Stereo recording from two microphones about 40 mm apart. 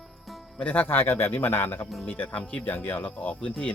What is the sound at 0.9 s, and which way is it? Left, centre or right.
Speech, left.